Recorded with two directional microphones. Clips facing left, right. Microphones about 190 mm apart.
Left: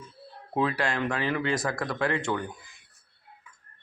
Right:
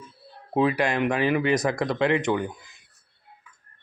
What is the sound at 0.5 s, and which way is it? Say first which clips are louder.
Speech: right 5 dB; 15° right (ahead or behind).